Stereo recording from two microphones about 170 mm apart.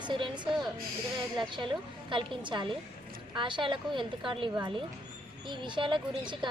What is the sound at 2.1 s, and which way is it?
A woman's voice, 30° right (ahead or behind).